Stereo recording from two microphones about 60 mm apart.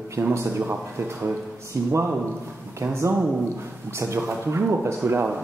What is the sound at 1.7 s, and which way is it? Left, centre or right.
Speech, right.